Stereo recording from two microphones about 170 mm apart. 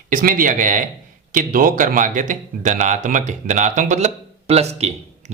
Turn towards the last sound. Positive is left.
turn(degrees=-40)  # may be behind; listen again after turning